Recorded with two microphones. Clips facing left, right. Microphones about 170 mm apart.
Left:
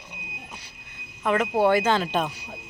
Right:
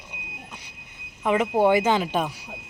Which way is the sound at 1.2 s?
15° right (ahead or behind).